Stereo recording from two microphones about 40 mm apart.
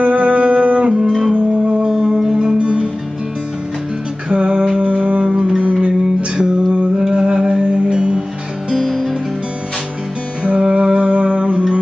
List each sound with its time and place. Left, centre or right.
0.0 s music: right
0.9 s music: centre
2.3 s music: right
4.3 s music: right
5.2 s music: right
8.7 s music: centre
10.4 s music: right